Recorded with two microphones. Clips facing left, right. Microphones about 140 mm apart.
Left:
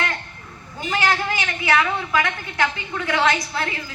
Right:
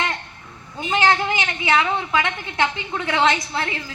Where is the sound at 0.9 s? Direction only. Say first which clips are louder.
Right 3 dB; 25° right (ahead or behind).